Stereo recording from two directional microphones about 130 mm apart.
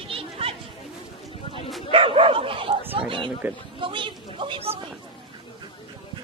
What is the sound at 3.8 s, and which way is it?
Speech, 40° right (ahead or behind).